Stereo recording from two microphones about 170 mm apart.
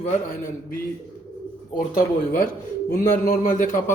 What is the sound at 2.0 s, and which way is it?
A man's voice, 55° left (ahead or behind).